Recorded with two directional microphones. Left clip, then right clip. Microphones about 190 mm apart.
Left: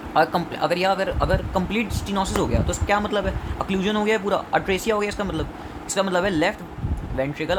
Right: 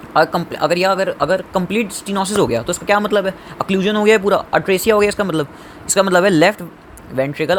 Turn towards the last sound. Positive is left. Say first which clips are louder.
# right 7 dB
turn(degrees=-30)  # may be behind; listen again after turning